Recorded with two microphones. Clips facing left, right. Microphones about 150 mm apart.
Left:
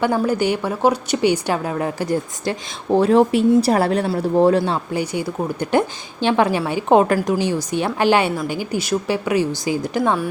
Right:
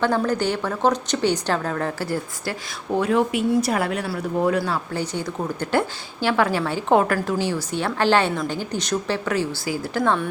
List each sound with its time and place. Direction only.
0.0 s a woman's voice: 10° left (ahead or behind)
4.9 s a woman's voice: 10° left (ahead or behind)